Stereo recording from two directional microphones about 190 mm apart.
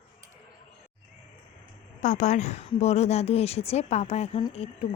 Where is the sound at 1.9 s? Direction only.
40° left (ahead or behind).